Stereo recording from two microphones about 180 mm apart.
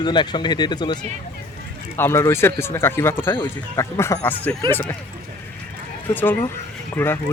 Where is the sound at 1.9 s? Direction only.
15° left (ahead or behind).